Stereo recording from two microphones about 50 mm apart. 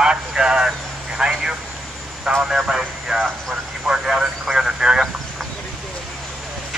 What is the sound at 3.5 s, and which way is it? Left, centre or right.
Vehicle, centre.